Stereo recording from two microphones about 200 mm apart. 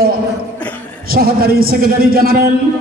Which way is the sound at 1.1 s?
50° right (ahead or behind).